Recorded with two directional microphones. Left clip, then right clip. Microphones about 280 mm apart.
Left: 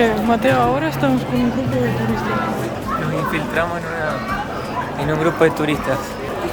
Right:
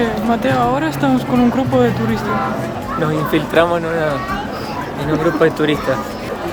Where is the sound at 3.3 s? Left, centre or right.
Right.